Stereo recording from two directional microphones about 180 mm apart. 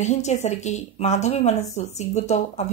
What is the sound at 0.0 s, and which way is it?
Speech, 40° left (ahead or behind).